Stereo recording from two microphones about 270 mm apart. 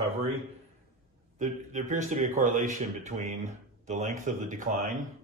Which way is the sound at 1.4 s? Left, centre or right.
Right.